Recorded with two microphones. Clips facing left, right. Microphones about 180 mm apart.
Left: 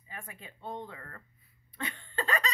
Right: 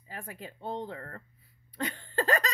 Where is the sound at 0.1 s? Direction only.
40° right (ahead or behind).